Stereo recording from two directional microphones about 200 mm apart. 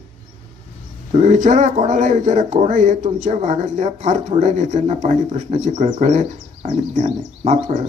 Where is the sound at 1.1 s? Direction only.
35° right (ahead or behind).